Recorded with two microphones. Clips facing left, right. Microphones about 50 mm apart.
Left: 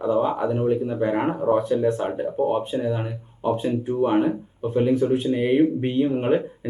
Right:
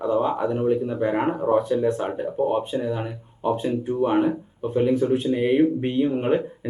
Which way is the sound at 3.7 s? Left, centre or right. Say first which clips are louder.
Left 1 dB; left.